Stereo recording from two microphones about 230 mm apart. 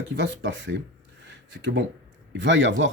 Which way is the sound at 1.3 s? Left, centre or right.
Right.